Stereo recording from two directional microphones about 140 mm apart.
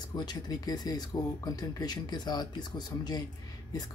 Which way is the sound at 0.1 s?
30° left (ahead or behind).